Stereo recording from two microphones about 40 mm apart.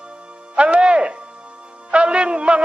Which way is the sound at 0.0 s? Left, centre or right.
Right.